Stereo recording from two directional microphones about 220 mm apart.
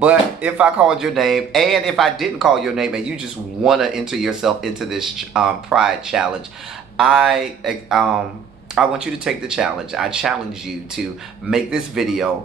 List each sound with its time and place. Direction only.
0.0 s speech: 5° right (ahead or behind)
11.5 s speech: centre (ahead or behind)